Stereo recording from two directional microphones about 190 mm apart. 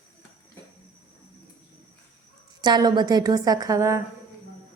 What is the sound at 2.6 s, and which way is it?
A woman's voice, 20° right (ahead or behind).